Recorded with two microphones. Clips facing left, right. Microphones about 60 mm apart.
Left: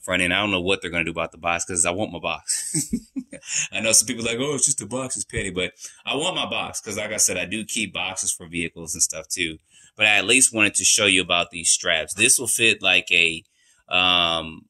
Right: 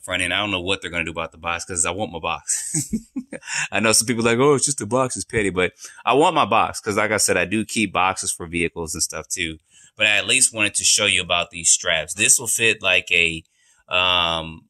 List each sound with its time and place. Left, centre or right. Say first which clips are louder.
0.0 s speech: left 1 dB; centre
2.2 s speech: right 2 dB; centre
3.3 s speech: right 7 dB; right
9.4 s speech: left 4 dB; centre